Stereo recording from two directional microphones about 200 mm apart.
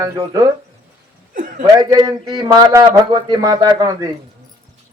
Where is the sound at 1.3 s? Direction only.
40° right (ahead or behind).